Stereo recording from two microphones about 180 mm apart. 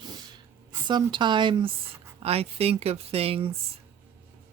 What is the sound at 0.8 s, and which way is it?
Speech, 25° right (ahead or behind).